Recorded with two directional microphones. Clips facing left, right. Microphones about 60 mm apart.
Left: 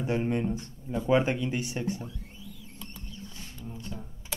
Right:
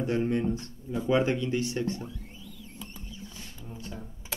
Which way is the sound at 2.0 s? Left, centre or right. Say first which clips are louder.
Right 1 dB; centre.